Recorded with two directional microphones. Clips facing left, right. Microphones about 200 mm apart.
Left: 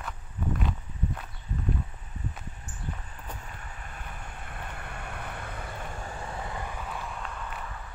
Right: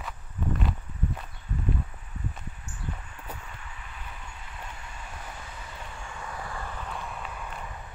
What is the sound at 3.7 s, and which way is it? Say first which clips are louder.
Vehicle: left 1 dB; 45° left (ahead or behind).